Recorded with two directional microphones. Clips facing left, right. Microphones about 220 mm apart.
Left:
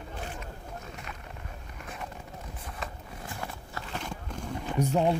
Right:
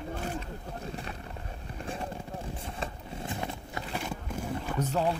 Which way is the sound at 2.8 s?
20° right (ahead or behind).